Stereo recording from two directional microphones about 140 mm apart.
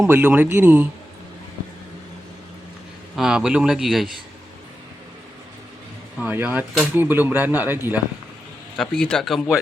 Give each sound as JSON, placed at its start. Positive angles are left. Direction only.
{"t": 0.0, "sound": "speech", "side_deg": -15}
{"t": 3.2, "sound": "speech", "side_deg": -5}
{"t": 6.1, "sound": "speech", "side_deg": -10}
{"t": 8.8, "sound": "speech", "side_deg": 5}